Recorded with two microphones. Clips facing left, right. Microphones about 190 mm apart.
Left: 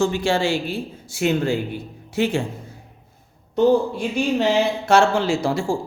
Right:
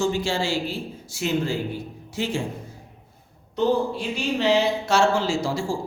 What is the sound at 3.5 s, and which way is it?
Speech, 50° left (ahead or behind).